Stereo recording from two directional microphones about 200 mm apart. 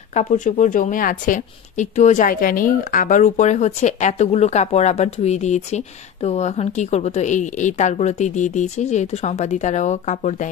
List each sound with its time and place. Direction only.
0.1 s speech: 35° left (ahead or behind)